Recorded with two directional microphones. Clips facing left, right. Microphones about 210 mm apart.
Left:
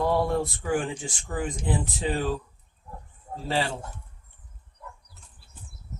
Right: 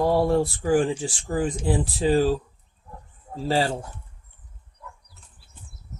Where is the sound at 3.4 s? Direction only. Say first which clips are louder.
Right 5 dB; 35° right (ahead or behind).